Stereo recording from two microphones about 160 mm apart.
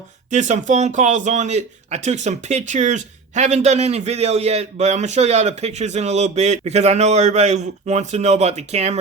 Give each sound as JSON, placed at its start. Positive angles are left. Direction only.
{"t": 0.3, "sound": "speech", "side_deg": -50}